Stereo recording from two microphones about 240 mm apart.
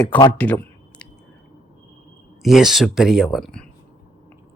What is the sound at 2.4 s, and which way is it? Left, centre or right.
Speech, centre.